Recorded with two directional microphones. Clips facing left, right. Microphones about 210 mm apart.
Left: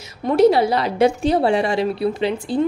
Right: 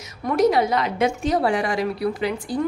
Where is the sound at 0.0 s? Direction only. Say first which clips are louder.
Left 5 dB; 30° left (ahead or behind).